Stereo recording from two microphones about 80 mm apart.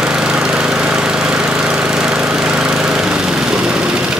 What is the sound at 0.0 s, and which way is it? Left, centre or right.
Engine, centre.